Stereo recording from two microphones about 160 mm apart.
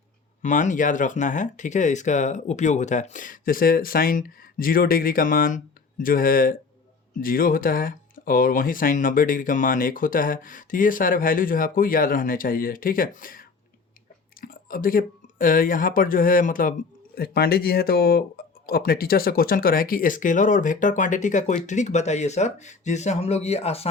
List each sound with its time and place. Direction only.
0.4 s speech: 50° left (ahead or behind)
14.4 s speech: 60° left (ahead or behind)
17.2 s speech: 75° left (ahead or behind); by 23.9 s 40° left (ahead or behind)